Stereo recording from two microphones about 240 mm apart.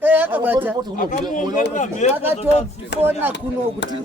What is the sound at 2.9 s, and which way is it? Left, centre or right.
Speech, left.